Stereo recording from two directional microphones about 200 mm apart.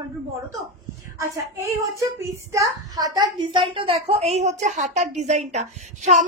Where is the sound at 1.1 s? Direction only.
15° right (ahead or behind).